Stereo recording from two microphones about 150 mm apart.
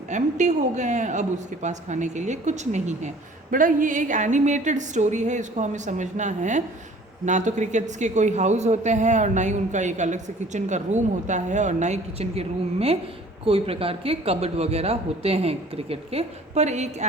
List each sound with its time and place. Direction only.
0.1 s a man's voice: 55° right (ahead or behind)
3.5 s a woman's voice: 65° right (ahead or behind)